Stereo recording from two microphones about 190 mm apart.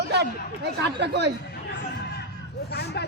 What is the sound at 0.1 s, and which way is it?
A man's voice, 60° right (ahead or behind).